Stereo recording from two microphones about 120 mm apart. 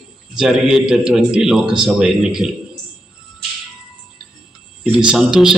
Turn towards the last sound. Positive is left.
turn(degrees=-5)  # may be behind; listen again after turning